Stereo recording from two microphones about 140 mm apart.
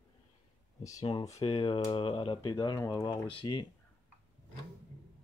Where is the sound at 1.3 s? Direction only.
45° left (ahead or behind).